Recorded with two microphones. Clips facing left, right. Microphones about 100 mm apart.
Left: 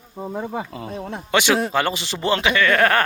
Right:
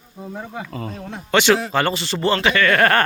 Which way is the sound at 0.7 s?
10° left (ahead or behind).